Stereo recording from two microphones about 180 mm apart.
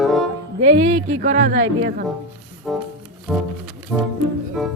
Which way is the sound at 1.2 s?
55° right (ahead or behind).